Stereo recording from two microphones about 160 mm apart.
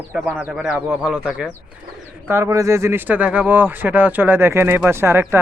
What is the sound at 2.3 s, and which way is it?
Speech, 15° right (ahead or behind).